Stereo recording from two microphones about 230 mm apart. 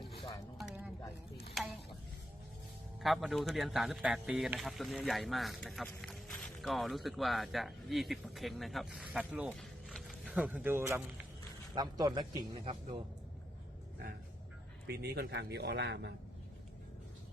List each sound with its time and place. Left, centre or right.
1.6 s a sound: centre
3.0 s speech: centre
14.8 s a man's voice: right